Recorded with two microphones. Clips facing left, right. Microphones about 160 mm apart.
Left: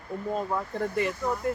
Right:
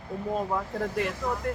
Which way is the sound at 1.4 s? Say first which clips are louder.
Left 3 dB; 5° left (ahead or behind).